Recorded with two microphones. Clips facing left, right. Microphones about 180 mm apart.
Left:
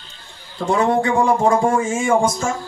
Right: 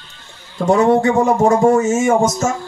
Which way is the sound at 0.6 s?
45° right (ahead or behind).